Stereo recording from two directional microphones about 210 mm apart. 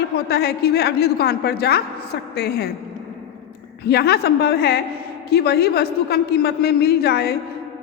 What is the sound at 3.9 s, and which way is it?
A woman's voice, 50° left (ahead or behind).